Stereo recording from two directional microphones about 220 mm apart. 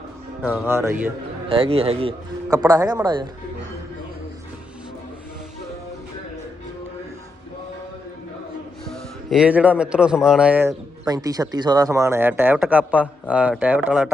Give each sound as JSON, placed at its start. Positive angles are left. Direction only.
{"t": 0.4, "sound": "speech", "side_deg": -10}
{"t": 1.5, "sound": "a man's voice", "side_deg": -25}
{"t": 8.9, "sound": "speech", "side_deg": -5}